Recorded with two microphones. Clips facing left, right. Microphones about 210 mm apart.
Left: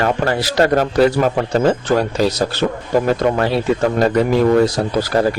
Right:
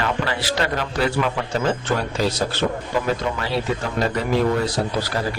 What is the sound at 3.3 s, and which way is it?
Speech, 50° left (ahead or behind).